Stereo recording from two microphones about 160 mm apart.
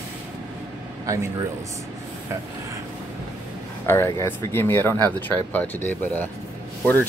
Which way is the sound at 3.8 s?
15° left (ahead or behind).